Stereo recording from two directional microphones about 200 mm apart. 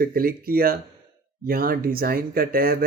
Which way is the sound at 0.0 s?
50° right (ahead or behind).